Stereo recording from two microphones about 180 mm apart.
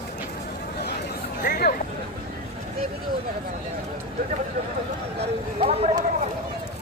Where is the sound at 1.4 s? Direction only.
60° left (ahead or behind).